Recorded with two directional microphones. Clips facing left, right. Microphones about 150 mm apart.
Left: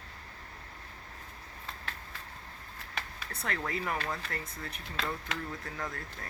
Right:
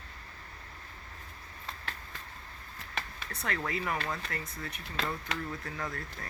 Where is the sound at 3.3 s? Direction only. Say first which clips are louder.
Right 1 dB; 30° left (ahead or behind).